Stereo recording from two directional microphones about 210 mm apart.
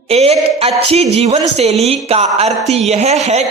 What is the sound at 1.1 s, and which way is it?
Speech, 30° right (ahead or behind).